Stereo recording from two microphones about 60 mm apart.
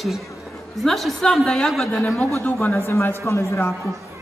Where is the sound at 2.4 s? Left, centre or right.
Left.